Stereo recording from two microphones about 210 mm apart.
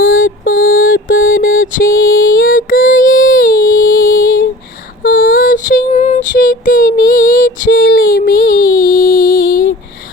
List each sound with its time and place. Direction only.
0.0 s mantra: 40° left (ahead or behind)
5.0 s child singing: 40° left (ahead or behind)